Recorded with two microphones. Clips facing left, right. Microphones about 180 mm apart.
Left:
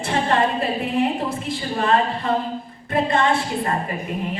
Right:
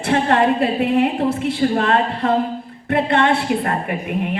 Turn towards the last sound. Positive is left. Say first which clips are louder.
# right 4 dB
turn(degrees=-65)  # may be behind; listen again after turning